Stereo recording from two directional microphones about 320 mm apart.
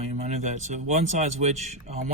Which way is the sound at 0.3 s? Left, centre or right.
Right.